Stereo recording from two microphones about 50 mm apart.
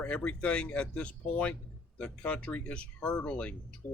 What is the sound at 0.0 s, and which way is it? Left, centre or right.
Speech, left.